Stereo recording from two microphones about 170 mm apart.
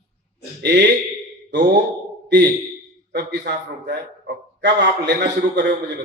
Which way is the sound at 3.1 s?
90° right.